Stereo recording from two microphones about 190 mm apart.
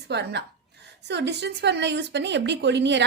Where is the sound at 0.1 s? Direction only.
65° right (ahead or behind).